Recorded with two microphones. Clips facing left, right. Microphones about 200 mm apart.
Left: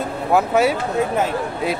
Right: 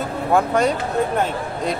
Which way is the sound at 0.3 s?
5° left (ahead or behind).